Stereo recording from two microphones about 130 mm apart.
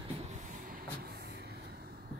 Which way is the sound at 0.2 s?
70° right (ahead or behind).